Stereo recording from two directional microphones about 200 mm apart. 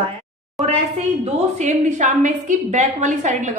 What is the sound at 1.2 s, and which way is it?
A woman's voice, 35° right (ahead or behind).